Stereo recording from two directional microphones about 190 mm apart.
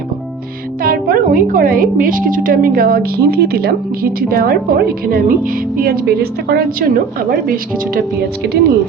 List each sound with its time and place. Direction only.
0.8 s a woman's voice: 50° right (ahead or behind)